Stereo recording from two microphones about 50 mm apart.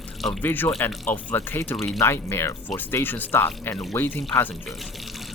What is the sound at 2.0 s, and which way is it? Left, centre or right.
Speech, left.